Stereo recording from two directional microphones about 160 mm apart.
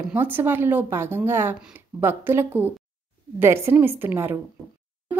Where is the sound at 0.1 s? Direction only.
10° right (ahead or behind).